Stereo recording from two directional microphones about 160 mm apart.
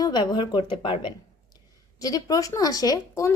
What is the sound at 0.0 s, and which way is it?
Speech, 25° left (ahead or behind).